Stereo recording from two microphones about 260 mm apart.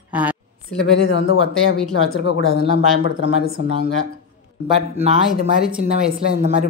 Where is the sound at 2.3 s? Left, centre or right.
Right.